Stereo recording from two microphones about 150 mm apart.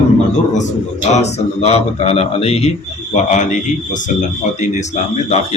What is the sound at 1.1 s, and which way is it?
A man's voice, 50° left (ahead or behind).